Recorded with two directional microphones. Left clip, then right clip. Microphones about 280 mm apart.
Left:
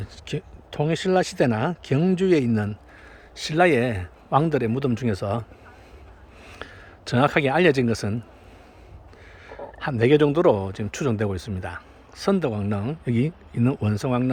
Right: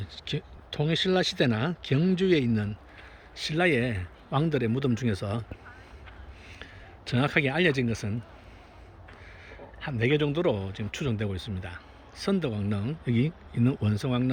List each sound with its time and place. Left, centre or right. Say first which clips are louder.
0.0 s speech: left 3 dB; centre
6.5 s speech: left 7 dB; centre
9.5 s speech: left 9 dB; centre